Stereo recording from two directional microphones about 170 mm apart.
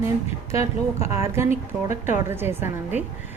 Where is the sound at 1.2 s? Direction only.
15° right (ahead or behind).